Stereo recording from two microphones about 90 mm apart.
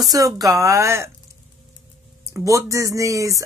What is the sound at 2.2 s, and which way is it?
Speech, 35° right (ahead or behind).